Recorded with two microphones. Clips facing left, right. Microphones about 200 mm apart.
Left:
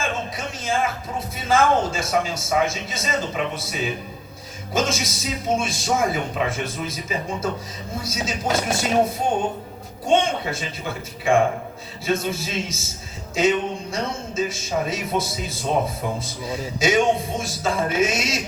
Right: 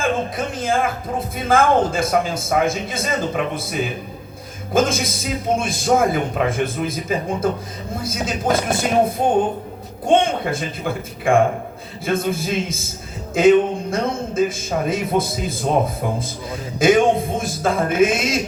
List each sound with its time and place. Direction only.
0.3 s a man's voice: 55° right (ahead or behind)
16.8 s a man's voice: 55° right (ahead or behind)